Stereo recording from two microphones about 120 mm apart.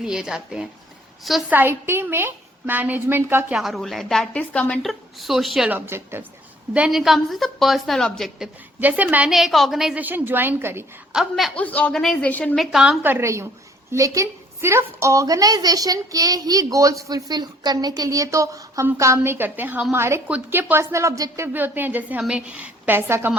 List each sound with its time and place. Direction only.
0.0 s a woman's voice: 5° right (ahead or behind)
1.5 s a woman's voice: 15° right (ahead or behind)
3.5 s a woman's voice: centre (ahead or behind)
4.8 s a woman's voice: centre (ahead or behind)
5.6 s a woman's voice: 15° right (ahead or behind)
6.7 s a woman's voice: 5° right (ahead or behind)
8.8 s a woman's voice: 15° right (ahead or behind)
10.0 s a woman's voice: 15° right (ahead or behind)
11.1 s a woman's voice: centre (ahead or behind)
11.5 s speech: 10° left (ahead or behind)
12.5 s a woman's voice: 5° right (ahead or behind)
13.0 s a woman's voice: 15° right (ahead or behind)